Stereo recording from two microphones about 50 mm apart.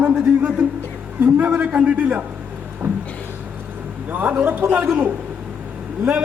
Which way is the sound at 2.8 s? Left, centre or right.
Right.